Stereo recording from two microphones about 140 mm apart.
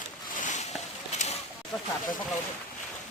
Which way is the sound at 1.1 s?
50° left (ahead or behind).